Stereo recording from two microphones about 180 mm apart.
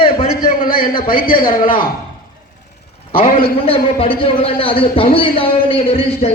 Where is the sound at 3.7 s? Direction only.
30° left (ahead or behind).